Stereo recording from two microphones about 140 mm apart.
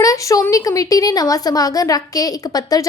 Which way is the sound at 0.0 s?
25° left (ahead or behind).